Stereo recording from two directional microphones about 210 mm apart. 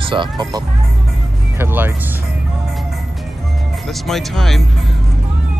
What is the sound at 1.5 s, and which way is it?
Speech, 10° right (ahead or behind).